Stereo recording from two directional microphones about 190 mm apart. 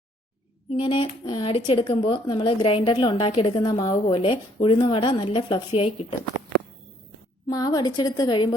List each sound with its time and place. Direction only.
0.7 s speech: 25° left (ahead or behind)
7.4 s speech: 20° left (ahead or behind)